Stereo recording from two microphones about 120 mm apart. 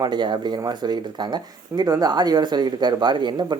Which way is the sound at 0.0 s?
40° right (ahead or behind).